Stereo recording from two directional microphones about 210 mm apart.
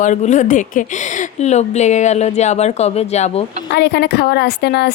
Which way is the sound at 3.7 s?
50° left (ahead or behind).